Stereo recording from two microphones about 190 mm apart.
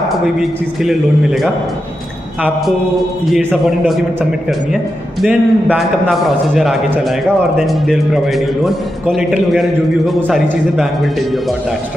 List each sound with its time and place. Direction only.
0.4 s a man's voice: centre (ahead or behind)
3.3 s a man's voice: centre (ahead or behind)
5.2 s a man's voice: 5° right (ahead or behind)